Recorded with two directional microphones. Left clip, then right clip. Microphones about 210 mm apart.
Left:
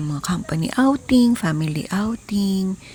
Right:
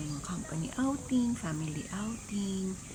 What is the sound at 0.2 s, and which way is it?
Speech, 50° left (ahead or behind).